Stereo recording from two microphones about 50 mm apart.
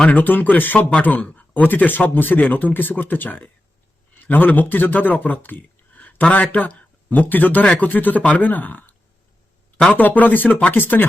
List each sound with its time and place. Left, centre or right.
0.1 s a man's voice: left
9.9 s speech: left